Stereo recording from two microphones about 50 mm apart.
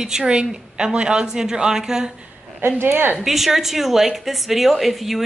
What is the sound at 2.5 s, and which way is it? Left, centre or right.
Speech, right.